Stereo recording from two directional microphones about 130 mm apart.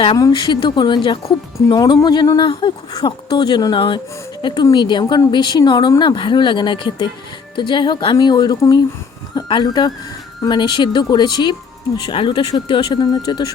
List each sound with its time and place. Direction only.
0.2 s speech: 35° left (ahead or behind)